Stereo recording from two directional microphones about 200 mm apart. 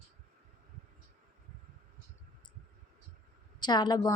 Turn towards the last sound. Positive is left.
turn(degrees=20)  # may be behind; listen again after turning